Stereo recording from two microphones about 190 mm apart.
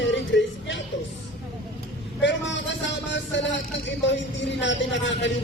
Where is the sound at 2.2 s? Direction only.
70° left (ahead or behind).